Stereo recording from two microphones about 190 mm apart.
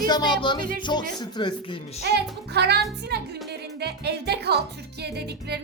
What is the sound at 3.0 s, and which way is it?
Speech, 60° right (ahead or behind).